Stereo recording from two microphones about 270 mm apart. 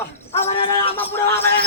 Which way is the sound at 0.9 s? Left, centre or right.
Centre.